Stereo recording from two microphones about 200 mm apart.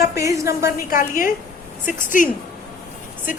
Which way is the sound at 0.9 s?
45° left (ahead or behind).